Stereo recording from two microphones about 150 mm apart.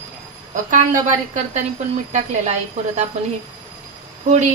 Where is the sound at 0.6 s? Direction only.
55° right (ahead or behind).